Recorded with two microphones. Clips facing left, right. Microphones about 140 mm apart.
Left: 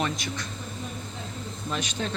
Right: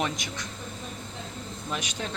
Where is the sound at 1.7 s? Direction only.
10° right (ahead or behind).